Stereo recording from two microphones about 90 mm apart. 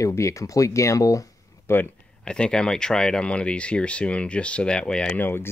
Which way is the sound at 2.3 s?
10° left (ahead or behind).